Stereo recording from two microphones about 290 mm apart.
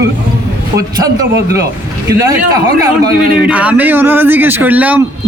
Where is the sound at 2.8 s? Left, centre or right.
Centre.